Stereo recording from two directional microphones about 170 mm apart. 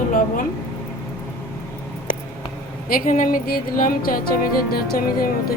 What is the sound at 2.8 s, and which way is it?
Speech, 55° left (ahead or behind).